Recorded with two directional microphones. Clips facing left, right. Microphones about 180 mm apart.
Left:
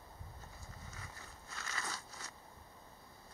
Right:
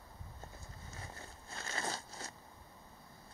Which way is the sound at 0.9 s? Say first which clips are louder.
Right 3 dB; 30° right (ahead or behind).